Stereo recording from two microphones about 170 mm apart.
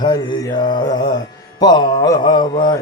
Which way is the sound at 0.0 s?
25° left (ahead or behind).